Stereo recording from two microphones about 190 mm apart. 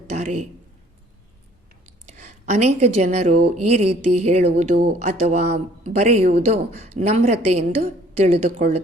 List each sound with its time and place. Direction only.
0.1 s a man's voice: 35° right (ahead or behind)
2.0 s a woman's voice: 35° right (ahead or behind)